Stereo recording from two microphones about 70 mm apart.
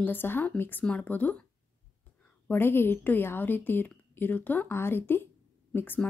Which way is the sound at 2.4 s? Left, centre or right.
Left.